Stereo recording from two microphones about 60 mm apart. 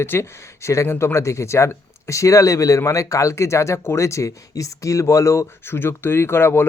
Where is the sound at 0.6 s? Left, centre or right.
Left.